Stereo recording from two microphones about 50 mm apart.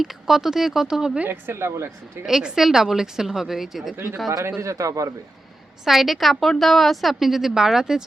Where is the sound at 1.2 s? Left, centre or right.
Right.